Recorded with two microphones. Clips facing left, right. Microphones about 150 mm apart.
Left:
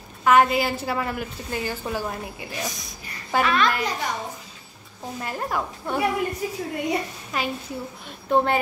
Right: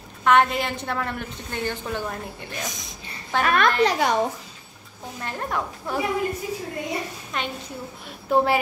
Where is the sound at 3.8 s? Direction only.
85° right.